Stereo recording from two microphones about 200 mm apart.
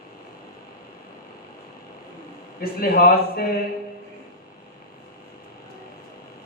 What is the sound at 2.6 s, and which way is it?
Speech, 50° left (ahead or behind).